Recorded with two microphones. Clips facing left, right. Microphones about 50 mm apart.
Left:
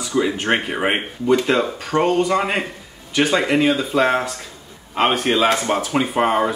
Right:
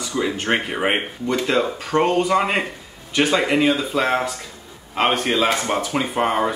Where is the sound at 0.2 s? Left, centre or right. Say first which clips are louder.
Left 2 dB; centre.